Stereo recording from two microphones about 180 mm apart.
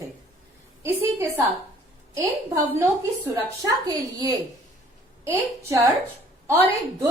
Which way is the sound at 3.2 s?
20° right (ahead or behind).